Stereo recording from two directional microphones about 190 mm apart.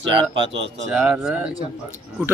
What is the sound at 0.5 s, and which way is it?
Speech, 65° right (ahead or behind).